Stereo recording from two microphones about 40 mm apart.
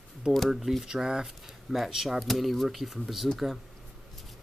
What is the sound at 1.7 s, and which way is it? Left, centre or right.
Speech, centre.